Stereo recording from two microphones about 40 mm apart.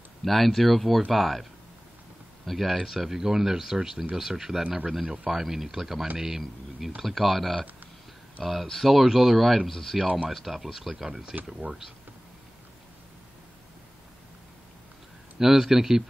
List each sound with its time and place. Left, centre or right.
0.2 s speech: centre
4.6 s speech: right
5.3 s speech: centre
8.6 s speech: centre
8.9 s speech: centre
9.7 s speech: centre
15.3 s speech: centre